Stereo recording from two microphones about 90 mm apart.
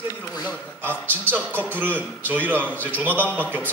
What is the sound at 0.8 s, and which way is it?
A man's voice, 20° right (ahead or behind).